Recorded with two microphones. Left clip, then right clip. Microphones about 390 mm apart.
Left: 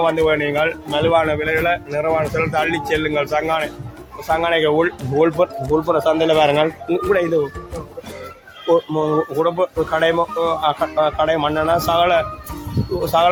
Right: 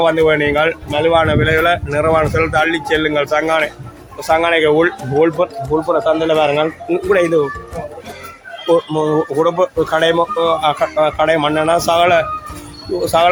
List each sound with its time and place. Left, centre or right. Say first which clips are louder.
0.0 s speech: right 4 dB; left
8.7 s speech: right 3 dB; left